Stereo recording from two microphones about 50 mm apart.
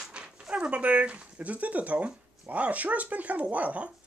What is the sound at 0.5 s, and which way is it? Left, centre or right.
Speech, right.